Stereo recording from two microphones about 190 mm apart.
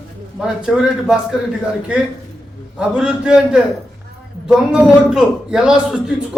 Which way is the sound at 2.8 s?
5° right (ahead or behind).